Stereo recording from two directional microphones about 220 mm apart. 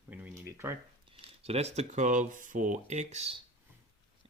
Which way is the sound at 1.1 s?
25° right (ahead or behind).